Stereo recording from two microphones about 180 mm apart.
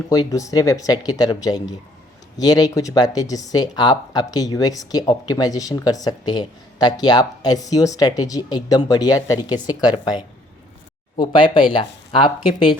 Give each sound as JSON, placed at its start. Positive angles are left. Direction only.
{"t": 0.1, "sound": "speech", "side_deg": 20}